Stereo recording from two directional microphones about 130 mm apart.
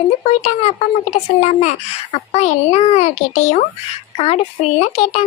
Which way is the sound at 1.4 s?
55° left (ahead or behind).